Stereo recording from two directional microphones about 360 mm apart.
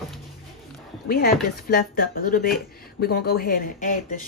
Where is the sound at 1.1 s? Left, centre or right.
Left.